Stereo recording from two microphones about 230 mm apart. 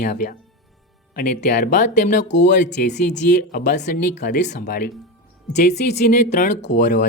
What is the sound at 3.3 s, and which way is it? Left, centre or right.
Speech, left.